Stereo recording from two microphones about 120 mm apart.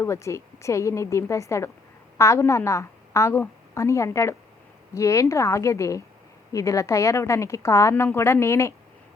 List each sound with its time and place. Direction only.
0.0 s a woman's voice: 25° left (ahead or behind)